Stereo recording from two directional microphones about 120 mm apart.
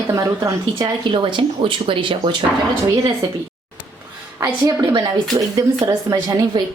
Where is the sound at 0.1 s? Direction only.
25° right (ahead or behind).